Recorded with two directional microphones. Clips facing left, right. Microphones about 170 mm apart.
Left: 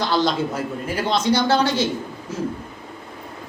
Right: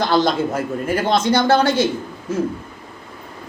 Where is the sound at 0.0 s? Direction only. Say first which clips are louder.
Right 3 dB; 50° right (ahead or behind).